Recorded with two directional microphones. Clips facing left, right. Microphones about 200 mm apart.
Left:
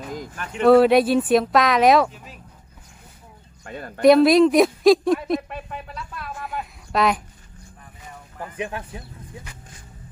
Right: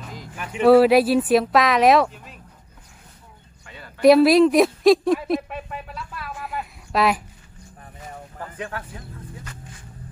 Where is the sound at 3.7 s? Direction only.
50° left (ahead or behind).